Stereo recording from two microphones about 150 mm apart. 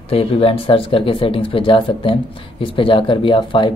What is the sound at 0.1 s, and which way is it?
Speech, 40° left (ahead or behind).